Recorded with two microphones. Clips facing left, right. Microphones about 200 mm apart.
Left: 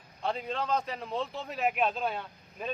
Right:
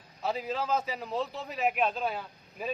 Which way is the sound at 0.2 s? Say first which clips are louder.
Right 1 dB; 5° right (ahead or behind).